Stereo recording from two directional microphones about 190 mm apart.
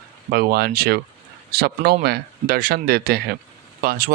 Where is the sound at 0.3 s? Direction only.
55° right (ahead or behind).